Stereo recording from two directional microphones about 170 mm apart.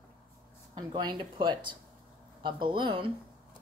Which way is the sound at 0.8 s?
25° right (ahead or behind).